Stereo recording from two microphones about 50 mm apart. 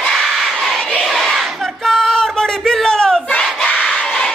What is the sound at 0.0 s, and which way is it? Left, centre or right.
Crowd, centre.